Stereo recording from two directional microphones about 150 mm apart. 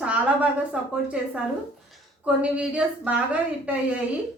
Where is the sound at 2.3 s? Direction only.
10° right (ahead or behind).